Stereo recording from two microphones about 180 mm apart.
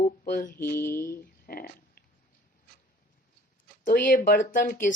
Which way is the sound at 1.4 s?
55° left (ahead or behind).